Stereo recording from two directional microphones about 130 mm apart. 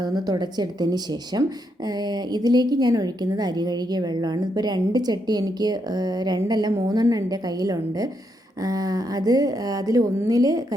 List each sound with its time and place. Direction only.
0.3 s a woman's voice: 30° right (ahead or behind)
2.3 s a woman's voice: 30° right (ahead or behind)
8.6 s a woman's voice: 30° right (ahead or behind)